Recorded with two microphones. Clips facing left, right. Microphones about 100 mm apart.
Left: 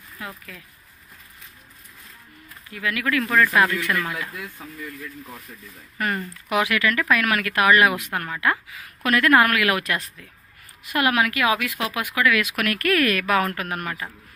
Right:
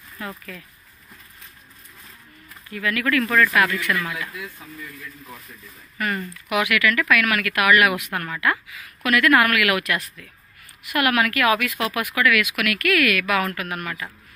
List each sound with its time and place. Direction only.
0.2 s speech: 10° left (ahead or behind)
2.7 s speech: 15° left (ahead or behind)
3.5 s speech: 25° left (ahead or behind)
5.9 s speech: 30° left (ahead or behind)